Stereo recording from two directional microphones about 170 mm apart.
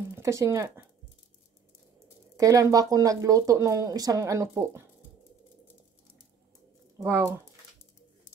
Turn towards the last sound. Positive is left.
turn(degrees=-15)  # may be behind; listen again after turning